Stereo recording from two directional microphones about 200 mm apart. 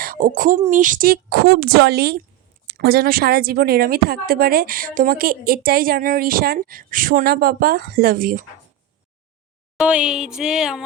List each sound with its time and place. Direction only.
0.0 s a woman's voice: 45° right (ahead or behind)
9.7 s speech: 5° right (ahead or behind)